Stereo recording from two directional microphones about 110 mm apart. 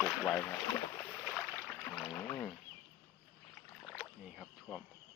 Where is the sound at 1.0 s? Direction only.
20° left (ahead or behind).